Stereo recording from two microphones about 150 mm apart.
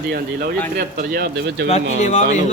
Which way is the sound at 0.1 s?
80° right.